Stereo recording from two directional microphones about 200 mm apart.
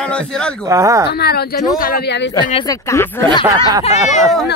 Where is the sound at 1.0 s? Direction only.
55° left (ahead or behind).